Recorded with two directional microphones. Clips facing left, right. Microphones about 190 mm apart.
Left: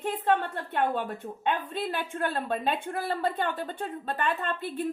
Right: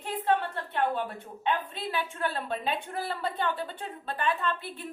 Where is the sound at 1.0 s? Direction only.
45° left (ahead or behind).